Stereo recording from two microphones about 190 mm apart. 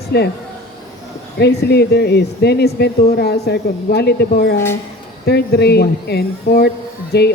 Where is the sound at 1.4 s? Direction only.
60° left (ahead or behind).